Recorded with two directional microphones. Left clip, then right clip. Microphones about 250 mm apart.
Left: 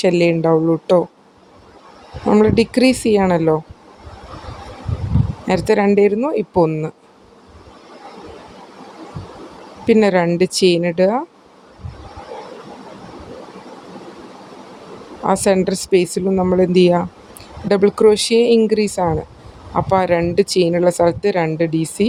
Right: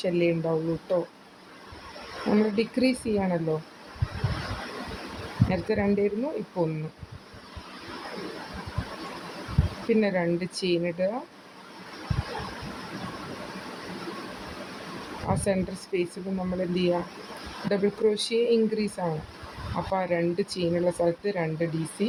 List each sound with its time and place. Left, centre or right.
0.0 s speech: left
2.3 s speech: left
5.5 s speech: left
9.9 s speech: left
15.3 s speech: left